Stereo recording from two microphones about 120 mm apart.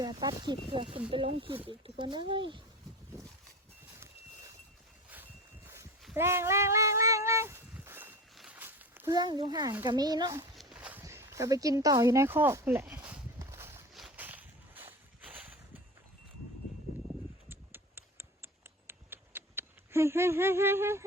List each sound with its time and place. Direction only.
0.0 s a child's voice: 35° right (ahead or behind)
0.7 s speech: 45° right (ahead or behind)
6.1 s a sound: 20° right (ahead or behind)
9.1 s a child's voice: 35° right (ahead or behind)
10.5 s walk: centre (ahead or behind)
10.8 s walk: 10° right (ahead or behind)
11.0 s speech: 20° right (ahead or behind)
13.4 s a sound: 20° right (ahead or behind)
17.5 s a sound: 20° right (ahead or behind)